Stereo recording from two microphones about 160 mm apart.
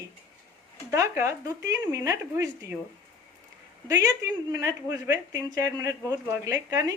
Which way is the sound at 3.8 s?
20° right (ahead or behind).